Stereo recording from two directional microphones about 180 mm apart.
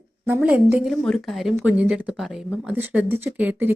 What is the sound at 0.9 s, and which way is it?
Speech, centre (ahead or behind).